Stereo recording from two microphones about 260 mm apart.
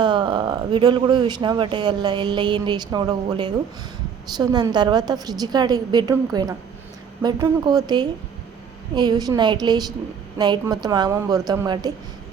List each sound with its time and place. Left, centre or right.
0.0 s speech: centre